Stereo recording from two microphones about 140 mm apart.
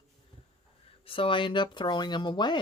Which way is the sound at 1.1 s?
40° left (ahead or behind).